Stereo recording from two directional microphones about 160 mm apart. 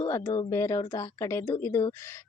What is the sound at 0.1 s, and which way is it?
Speech, 20° left (ahead or behind).